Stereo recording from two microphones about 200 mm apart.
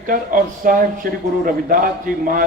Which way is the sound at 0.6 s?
45° right (ahead or behind).